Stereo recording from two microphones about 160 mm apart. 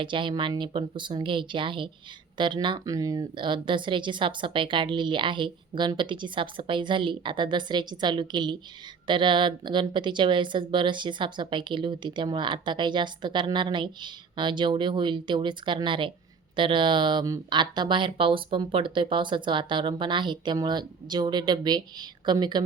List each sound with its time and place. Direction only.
0.0 s speech: 30° right (ahead or behind)